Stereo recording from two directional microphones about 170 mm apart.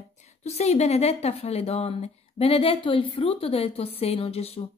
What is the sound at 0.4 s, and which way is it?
A woman's voice, 40° left (ahead or behind).